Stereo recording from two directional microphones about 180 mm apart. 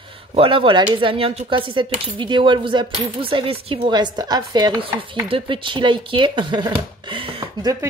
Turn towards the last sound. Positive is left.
turn(degrees=-30)  # may be behind; listen again after turning